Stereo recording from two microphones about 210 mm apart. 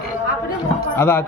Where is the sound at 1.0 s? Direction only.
10° left (ahead or behind).